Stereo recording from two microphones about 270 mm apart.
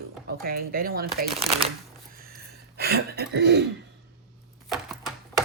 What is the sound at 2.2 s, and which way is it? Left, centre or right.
Throat clearing, right.